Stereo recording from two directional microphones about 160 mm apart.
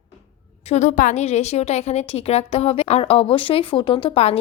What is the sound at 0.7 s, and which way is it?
A woman's voice, 50° left (ahead or behind).